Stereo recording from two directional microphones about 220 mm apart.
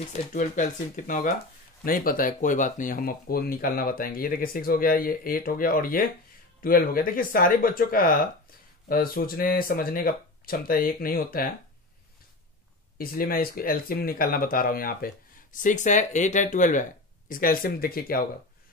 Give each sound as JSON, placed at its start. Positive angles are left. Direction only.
{"t": 0.1, "sound": "speech", "side_deg": 35}
{"t": 12.9, "sound": "speech", "side_deg": 40}